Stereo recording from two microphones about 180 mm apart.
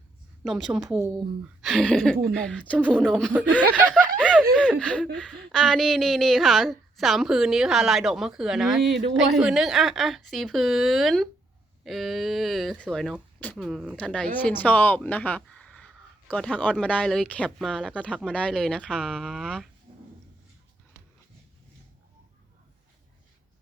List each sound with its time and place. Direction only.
0.4 s speech: centre (ahead or behind)
0.9 s speech: 15° right (ahead or behind)
1.6 s speech: 5° left (ahead or behind)
2.1 s a woman's voice: 55° right (ahead or behind)
2.4 s speech: 5° left (ahead or behind)
3.6 s speech: 10° right (ahead or behind)
4.2 s snicker: 5° left (ahead or behind)
4.5 s speech: 5° left (ahead or behind)